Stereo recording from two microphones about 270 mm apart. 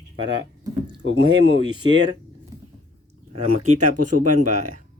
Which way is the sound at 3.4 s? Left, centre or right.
Right.